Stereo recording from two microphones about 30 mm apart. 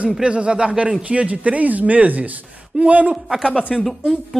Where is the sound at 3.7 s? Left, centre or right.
Centre.